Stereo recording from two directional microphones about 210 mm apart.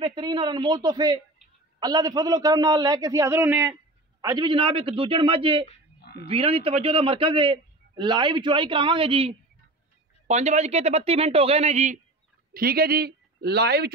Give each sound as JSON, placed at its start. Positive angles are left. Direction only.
{"t": 0.0, "sound": "a man's voice", "side_deg": -20}
{"t": 4.2, "sound": "a man's voice", "side_deg": -20}
{"t": 5.9, "sound": "goose", "side_deg": 50}
{"t": 6.2, "sound": "a man's voice", "side_deg": -25}
{"t": 12.5, "sound": "speech", "side_deg": -45}